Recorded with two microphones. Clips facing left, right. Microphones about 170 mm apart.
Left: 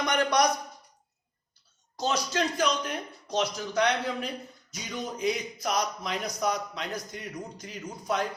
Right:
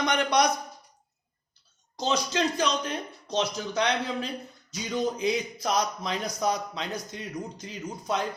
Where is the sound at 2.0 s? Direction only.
20° right (ahead or behind).